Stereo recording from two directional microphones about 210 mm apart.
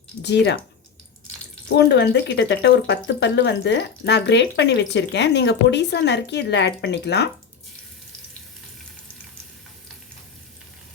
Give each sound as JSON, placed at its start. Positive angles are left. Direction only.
{"t": 0.2, "sound": "speech", "side_deg": 55}
{"t": 1.7, "sound": "speech", "side_deg": 50}